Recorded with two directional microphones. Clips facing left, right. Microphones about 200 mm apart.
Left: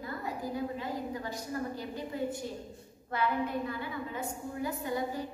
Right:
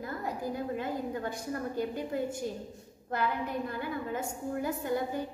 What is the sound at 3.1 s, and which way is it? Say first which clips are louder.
A woman's voice: left 1 dB; 45° right (ahead or behind).